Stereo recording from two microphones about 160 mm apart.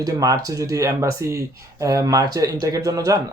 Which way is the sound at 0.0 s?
20° right (ahead or behind).